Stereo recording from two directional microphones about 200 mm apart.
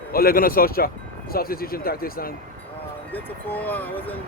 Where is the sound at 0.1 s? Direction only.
45° left (ahead or behind).